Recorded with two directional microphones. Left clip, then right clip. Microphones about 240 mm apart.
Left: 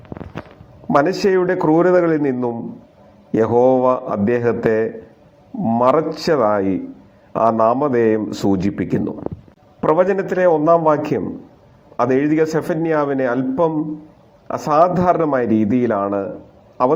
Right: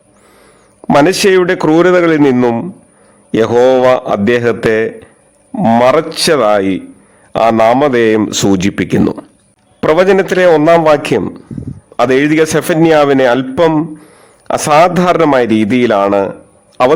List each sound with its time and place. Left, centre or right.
0.9 s a man's voice: right